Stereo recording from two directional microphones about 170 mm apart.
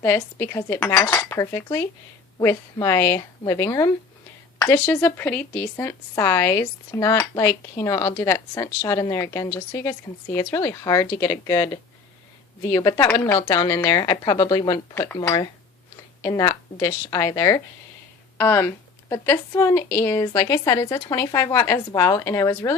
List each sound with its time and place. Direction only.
0.0 s a woman's voice: 15° left (ahead or behind)